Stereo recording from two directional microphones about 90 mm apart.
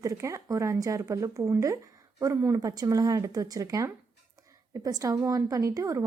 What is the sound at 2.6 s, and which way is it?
A woman's voice, 45° right (ahead or behind).